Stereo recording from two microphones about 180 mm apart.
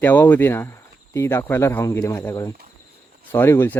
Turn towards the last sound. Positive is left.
turn(degrees=15)  # may be behind; listen again after turning